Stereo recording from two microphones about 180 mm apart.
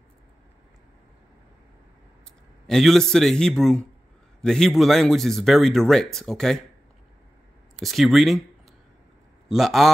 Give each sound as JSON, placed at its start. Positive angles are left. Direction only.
{"t": 2.6, "sound": "speech", "side_deg": 0}
{"t": 7.7, "sound": "speech", "side_deg": 0}
{"t": 9.5, "sound": "speech", "side_deg": 0}